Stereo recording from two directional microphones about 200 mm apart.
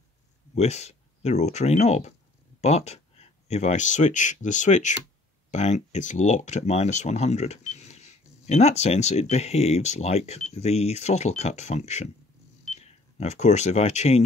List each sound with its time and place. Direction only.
0.6 s speech: 35° left (ahead or behind)